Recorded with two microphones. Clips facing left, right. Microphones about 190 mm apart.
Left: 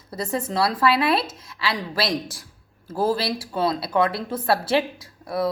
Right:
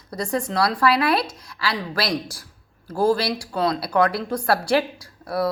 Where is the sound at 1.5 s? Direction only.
25° left (ahead or behind).